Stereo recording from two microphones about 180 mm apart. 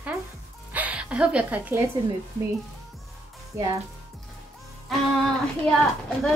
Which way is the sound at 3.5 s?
15° right (ahead or behind).